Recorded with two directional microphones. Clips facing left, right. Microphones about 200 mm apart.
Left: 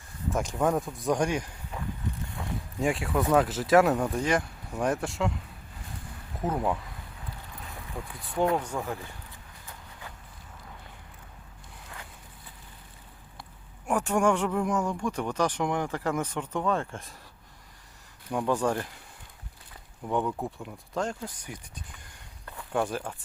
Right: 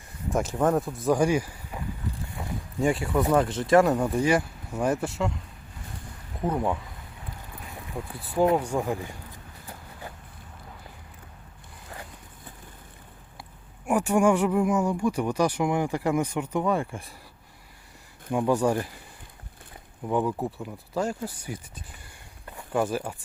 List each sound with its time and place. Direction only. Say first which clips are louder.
0.3 s speech: right 3 dB; 5° right (ahead or behind)
2.4 s a sound: right 1 dB; 20° right (ahead or behind)
2.8 s speech: right 3 dB; centre (ahead or behind)
6.4 s speech: right 2 dB; centre (ahead or behind)
7.9 s speech: right 4 dB; 20° right (ahead or behind)
13.8 s speech: right 3 dB; 10° right (ahead or behind)
18.3 s speech: right 4 dB; 10° right (ahead or behind)
20.1 s speech: right 3 dB; 5° right (ahead or behind)